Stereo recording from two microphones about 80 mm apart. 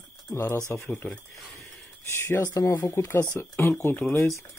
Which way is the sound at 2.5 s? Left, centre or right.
Left.